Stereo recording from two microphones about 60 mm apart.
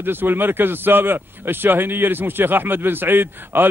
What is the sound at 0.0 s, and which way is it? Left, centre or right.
Speech, right.